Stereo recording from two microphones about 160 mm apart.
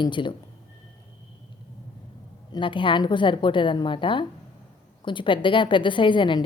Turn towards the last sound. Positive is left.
turn(degrees=30)  # may be behind; listen again after turning